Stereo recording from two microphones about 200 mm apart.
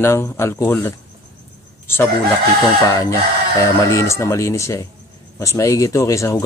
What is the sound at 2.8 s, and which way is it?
Speech, 15° left (ahead or behind).